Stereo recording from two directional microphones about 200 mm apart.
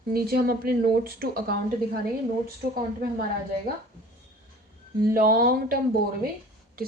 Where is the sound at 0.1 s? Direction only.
50° right (ahead or behind).